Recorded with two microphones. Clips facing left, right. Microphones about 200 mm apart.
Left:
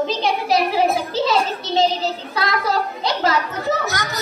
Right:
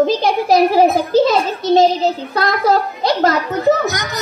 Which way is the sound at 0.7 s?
45° right (ahead or behind).